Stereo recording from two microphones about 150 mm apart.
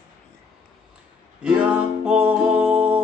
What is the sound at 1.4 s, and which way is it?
Speech, 10° right (ahead or behind).